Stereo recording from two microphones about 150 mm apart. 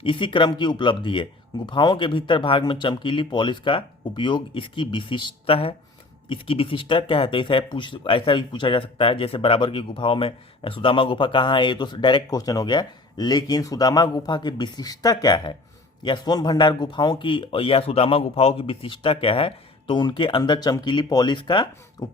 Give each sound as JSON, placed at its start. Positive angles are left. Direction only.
{"t": 0.0, "sound": "speech", "side_deg": 35}
{"t": 22.0, "sound": "beatboxing", "side_deg": 25}